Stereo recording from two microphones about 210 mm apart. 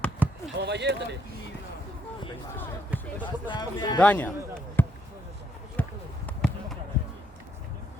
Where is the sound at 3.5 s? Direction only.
20° left (ahead or behind).